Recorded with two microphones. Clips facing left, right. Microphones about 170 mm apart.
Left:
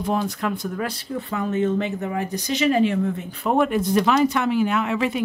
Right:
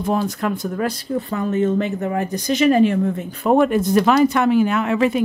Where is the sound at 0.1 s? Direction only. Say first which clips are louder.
Right 3 dB; 45° right (ahead or behind).